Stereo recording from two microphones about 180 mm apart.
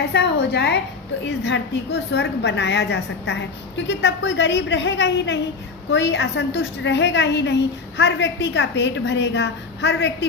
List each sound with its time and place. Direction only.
0.1 s a woman's voice: 65° left (ahead or behind)
1.2 s a woman's voice: 80° left